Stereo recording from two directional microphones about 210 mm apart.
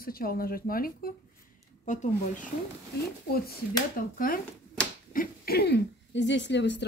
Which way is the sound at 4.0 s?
40° left (ahead or behind).